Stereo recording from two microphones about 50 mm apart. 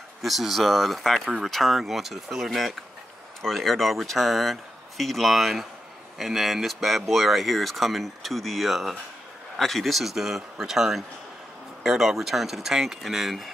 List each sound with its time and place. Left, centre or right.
0.2 s speech: centre